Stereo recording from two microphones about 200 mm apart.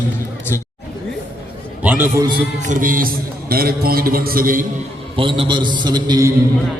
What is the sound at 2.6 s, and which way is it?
A man's voice, 45° right (ahead or behind).